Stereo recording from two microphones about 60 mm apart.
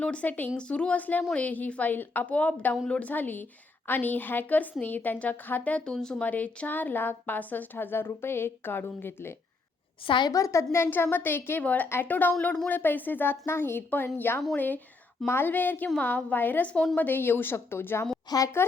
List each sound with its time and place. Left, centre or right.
0.0 s a woman's voice: left
0.5 s a woman's voice: centre
3.1 s a woman's voice: left; by 6.2 s centre
6.2 s a woman's voice: left
10.3 s a woman's voice: left
10.8 s a woman's voice: left
11.6 s a woman's voice: left
18.3 s a woman's voice: left